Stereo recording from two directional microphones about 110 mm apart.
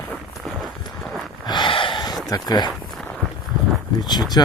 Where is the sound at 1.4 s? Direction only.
45° left (ahead or behind).